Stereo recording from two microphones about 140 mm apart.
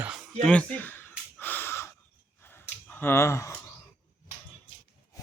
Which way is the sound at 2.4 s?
15° left (ahead or behind).